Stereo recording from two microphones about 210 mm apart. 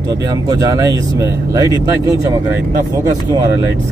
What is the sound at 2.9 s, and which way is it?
Speech, 15° right (ahead or behind).